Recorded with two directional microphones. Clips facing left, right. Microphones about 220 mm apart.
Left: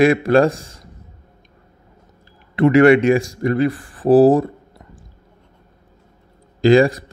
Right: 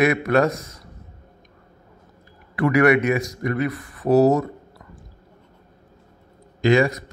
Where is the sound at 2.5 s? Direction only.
25° left (ahead or behind).